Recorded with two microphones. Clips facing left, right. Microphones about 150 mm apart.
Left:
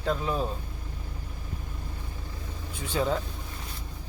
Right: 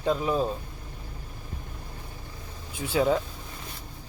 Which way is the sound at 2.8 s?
10° right (ahead or behind).